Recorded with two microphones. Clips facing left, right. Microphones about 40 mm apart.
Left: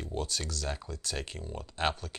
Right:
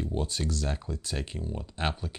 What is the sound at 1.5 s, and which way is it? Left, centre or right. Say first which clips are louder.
Speech: left 1 dB; centre.